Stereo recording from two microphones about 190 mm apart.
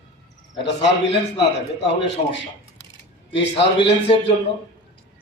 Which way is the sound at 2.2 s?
30° left (ahead or behind).